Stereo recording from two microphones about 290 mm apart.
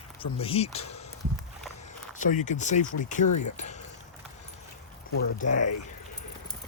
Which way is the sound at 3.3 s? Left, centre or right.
Left.